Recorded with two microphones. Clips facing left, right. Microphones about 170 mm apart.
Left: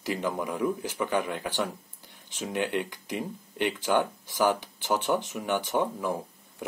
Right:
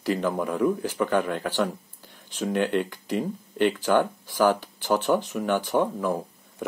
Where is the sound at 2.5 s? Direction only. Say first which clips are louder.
Right 4 dB; 15° left (ahead or behind).